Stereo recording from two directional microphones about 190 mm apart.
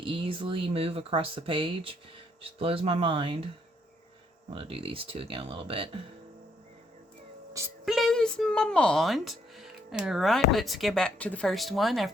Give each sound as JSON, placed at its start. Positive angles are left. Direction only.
{"t": 0.0, "sound": "speech", "side_deg": -25}
{"t": 4.5, "sound": "speech", "side_deg": -30}
{"t": 7.9, "sound": "speech", "side_deg": 0}